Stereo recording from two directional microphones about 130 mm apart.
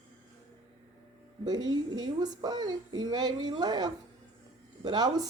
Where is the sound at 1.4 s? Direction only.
30° right (ahead or behind).